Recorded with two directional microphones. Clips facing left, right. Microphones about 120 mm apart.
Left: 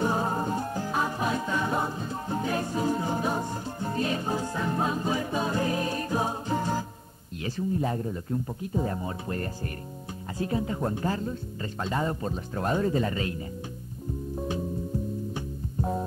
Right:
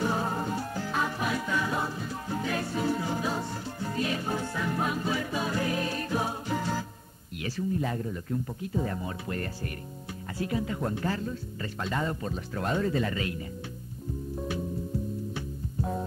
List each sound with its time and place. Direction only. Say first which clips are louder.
0.0 s music: left 2 dB; 25° left (ahead or behind)
7.4 s speech: left 2 dB; 25° left (ahead or behind)
15.3 s music: left 2 dB; 25° left (ahead or behind)